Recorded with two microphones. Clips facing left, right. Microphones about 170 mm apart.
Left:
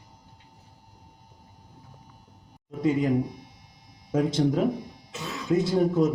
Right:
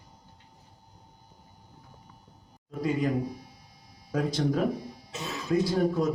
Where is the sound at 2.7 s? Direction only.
20° left (ahead or behind).